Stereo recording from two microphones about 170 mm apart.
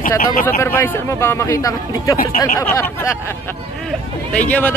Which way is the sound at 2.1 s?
60° left (ahead or behind).